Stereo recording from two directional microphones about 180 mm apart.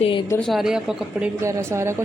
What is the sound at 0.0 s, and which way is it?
Speech, 30° left (ahead or behind).